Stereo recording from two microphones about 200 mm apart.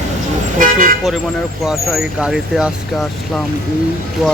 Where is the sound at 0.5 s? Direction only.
40° right (ahead or behind).